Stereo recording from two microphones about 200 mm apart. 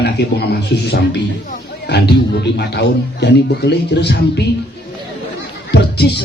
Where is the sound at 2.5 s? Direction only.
55° left (ahead or behind).